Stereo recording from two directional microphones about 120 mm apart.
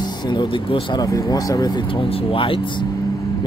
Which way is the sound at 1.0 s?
30° left (ahead or behind).